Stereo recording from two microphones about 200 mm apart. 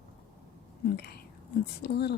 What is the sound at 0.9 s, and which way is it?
Speech, 50° left (ahead or behind).